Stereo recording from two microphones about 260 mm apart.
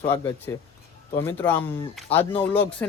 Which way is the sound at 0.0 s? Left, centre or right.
Centre.